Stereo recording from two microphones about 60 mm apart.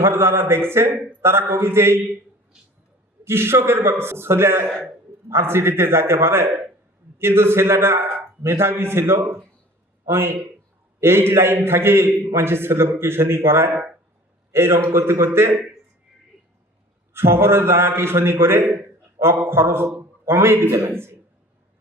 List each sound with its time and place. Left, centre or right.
0.0 s a man's voice: right
3.2 s a man's voice: right
17.2 s a man's voice: right